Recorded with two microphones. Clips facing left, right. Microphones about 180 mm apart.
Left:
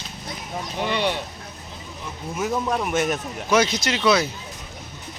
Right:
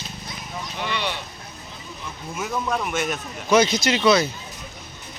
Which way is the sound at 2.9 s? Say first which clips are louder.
Left 3 dB; 40° left (ahead or behind).